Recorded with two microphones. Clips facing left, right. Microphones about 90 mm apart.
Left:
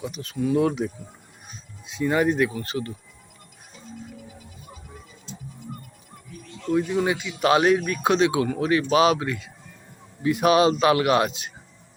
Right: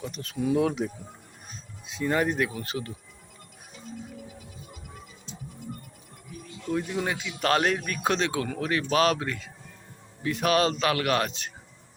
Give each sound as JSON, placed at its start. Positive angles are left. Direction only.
{"t": 0.0, "sound": "speech", "side_deg": 5}
{"t": 6.5, "sound": "speech", "side_deg": -5}